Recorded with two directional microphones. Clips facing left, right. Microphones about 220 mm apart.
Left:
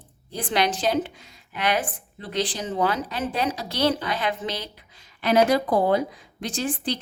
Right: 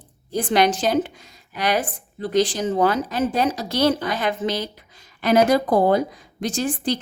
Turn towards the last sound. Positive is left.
turn(degrees=-45)  # may be behind; listen again after turning